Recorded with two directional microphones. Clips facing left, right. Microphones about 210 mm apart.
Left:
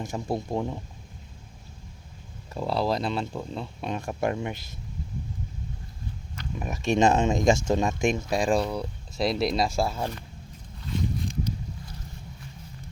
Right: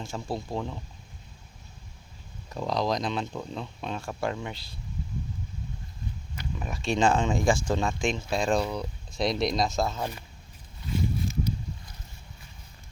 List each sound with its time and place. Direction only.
0.0 s speech: 20° left (ahead or behind)
2.5 s speech: 5° left (ahead or behind)
6.8 s speech: 20° left (ahead or behind)
7.9 s speech: 45° left (ahead or behind)
8.3 s speech: 15° left (ahead or behind)
10.8 s a sound: 5° right (ahead or behind)